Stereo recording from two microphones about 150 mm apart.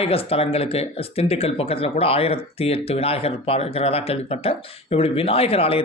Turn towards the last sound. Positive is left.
turn(degrees=40)  # may be behind; listen again after turning